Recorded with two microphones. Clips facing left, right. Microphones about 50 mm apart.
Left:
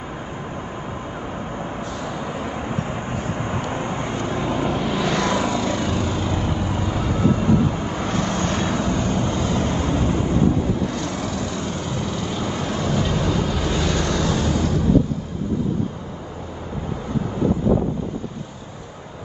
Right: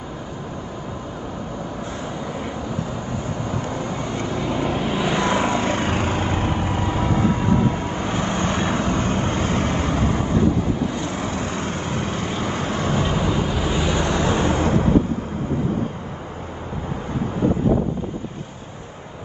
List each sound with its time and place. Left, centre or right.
2.7 s vehicle: left
4.7 s vehicle: centre; by 8.1 s right
8.1 s vehicle: right
8.7 s vehicle: right
10.9 s vehicle: right
13.1 s waves: centre; by 15.0 s right
17.6 s wind noise: right